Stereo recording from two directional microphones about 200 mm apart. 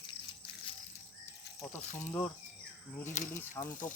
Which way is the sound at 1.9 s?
10° left (ahead or behind).